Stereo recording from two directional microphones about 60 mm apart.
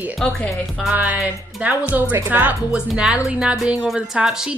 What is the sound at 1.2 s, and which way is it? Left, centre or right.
Speech, right.